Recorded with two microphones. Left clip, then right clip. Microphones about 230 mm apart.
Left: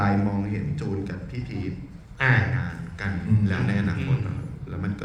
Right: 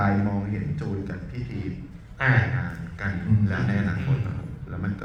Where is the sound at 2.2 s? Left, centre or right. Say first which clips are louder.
Left 1 dB; left.